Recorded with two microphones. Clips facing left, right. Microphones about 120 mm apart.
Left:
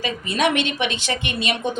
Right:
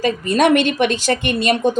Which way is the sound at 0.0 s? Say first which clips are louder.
Right 6 dB; 45° right (ahead or behind).